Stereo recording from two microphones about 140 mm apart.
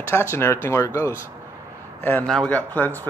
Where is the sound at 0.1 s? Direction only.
15° left (ahead or behind).